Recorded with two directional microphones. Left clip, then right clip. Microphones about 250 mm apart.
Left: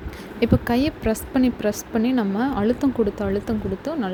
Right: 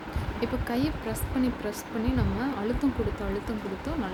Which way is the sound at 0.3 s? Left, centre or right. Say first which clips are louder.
Left 10 dB; left.